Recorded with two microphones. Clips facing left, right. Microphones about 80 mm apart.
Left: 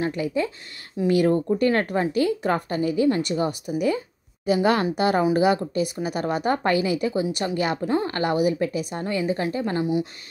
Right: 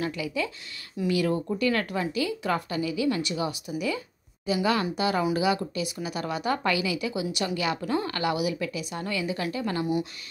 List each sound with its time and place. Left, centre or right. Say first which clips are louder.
0.0 s a woman's voice: left 5 dB; left